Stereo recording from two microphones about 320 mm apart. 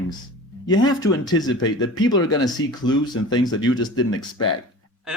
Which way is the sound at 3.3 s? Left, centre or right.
Centre.